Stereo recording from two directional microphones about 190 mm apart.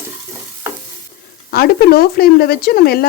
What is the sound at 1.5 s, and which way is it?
Speech, 50° left (ahead or behind).